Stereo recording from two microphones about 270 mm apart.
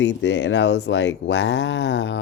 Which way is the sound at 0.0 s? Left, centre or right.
Left.